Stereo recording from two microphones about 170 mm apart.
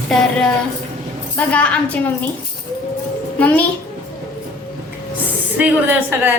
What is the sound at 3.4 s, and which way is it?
Speech, 10° left (ahead or behind).